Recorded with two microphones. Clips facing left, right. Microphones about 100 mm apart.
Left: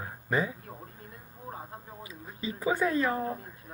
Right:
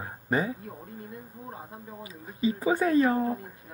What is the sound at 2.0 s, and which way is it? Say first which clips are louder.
Speech: right 12 dB; 30° right (ahead or behind).